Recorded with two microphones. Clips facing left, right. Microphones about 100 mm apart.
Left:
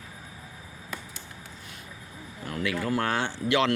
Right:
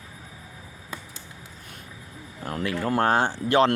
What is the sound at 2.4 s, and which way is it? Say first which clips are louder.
Speech: right 2 dB; 40° right (ahead or behind).